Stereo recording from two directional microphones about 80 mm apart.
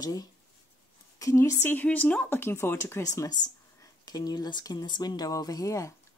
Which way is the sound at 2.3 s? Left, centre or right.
Left.